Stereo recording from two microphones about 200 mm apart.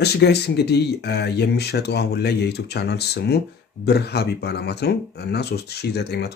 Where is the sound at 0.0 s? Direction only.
55° left (ahead or behind).